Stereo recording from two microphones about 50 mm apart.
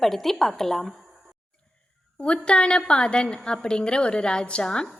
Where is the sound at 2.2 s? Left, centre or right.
Left.